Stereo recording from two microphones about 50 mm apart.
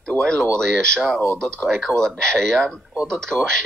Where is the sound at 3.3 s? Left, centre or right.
Left.